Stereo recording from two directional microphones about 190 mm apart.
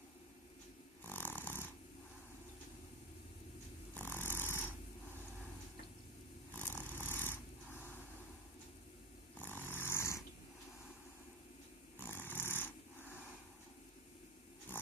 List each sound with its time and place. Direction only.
1.0 s snoring: 10° left (ahead or behind)
3.9 s snoring: 10° left (ahead or behind)
6.6 s snoring: 10° left (ahead or behind)
9.4 s dog: 10° left (ahead or behind)
11.9 s dog: 10° left (ahead or behind)